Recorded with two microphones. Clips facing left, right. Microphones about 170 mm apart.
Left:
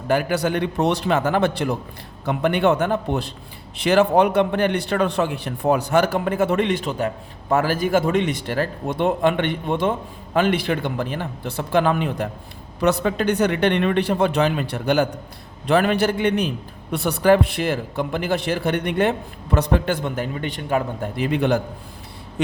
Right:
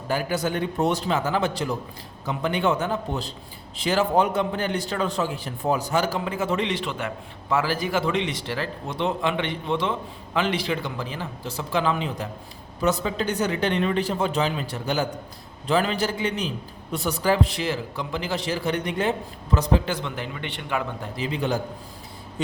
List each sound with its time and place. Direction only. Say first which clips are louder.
0.1 s a man's voice: left 5 dB; 65° left (ahead or behind); by 21.1 s 40° left (ahead or behind)
21.2 s a man's voice: left 6 dB; 60° left (ahead or behind)